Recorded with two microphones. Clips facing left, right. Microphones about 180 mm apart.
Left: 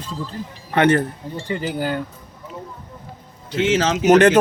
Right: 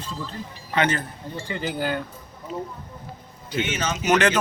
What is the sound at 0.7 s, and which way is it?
Speech, 60° left (ahead or behind).